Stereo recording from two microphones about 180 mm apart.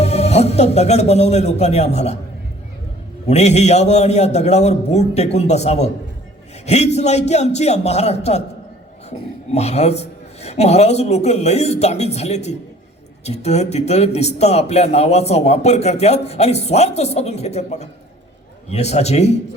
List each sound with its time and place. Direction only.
0.0 s a man's voice: 35° left (ahead or behind)
3.2 s a man's voice: 40° left (ahead or behind)